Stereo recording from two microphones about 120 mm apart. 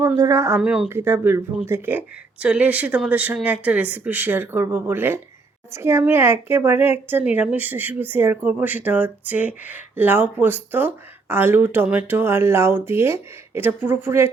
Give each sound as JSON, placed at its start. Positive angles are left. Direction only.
{"t": 0.0, "sound": "speech", "side_deg": -25}
{"t": 0.6, "sound": "a woman's voice", "side_deg": -5}
{"t": 0.9, "sound": "a woman's voice", "side_deg": -20}